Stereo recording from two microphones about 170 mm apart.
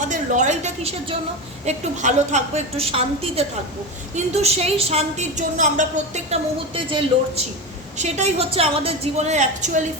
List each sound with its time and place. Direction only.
0.1 s a woman's voice: 45° right (ahead or behind)
6.7 s a woman's voice: 30° right (ahead or behind)
7.9 s a woman's voice: 40° right (ahead or behind)